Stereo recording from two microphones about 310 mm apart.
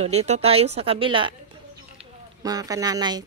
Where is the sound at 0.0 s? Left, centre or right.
Right.